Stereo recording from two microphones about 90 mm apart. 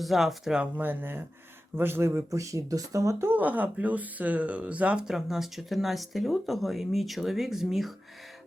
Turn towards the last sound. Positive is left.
turn(degrees=0)  # may be behind; listen again after turning